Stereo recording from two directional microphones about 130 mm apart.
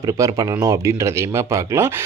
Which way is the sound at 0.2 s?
25° right (ahead or behind).